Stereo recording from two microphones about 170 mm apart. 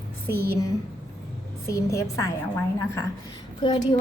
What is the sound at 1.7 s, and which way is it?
A woman's voice, 15° left (ahead or behind).